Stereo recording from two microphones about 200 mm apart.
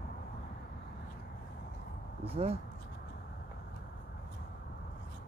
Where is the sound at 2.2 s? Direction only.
30° right (ahead or behind).